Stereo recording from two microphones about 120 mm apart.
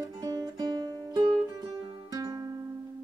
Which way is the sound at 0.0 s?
30° right (ahead or behind).